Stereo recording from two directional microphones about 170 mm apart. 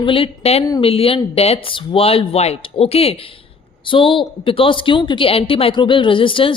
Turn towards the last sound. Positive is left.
turn(degrees=30)  # may be behind; listen again after turning